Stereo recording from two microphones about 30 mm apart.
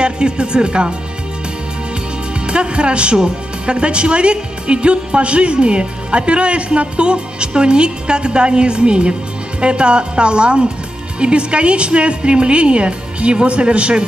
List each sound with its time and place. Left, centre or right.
0.0 s a woman's voice: right
2.4 s a woman's voice: right